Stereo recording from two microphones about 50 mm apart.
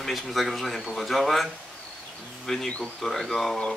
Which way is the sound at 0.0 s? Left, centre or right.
Centre.